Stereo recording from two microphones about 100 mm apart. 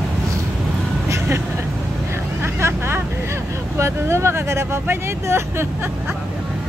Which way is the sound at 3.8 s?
25° right (ahead or behind).